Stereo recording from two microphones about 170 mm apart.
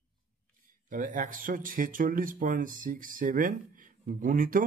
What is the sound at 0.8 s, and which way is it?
Speech, 50° right (ahead or behind).